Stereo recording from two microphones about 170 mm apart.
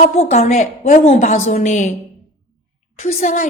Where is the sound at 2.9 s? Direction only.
45° left (ahead or behind).